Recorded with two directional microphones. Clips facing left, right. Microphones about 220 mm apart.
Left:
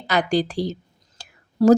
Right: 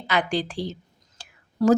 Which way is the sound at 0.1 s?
40° left (ahead or behind).